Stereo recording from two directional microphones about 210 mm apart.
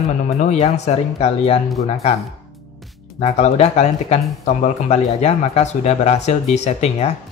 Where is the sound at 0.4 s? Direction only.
30° left (ahead or behind).